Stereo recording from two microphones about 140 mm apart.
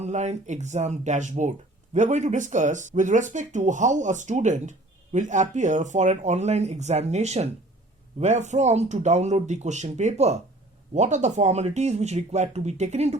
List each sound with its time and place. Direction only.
0.0 s speech: 55° right (ahead or behind)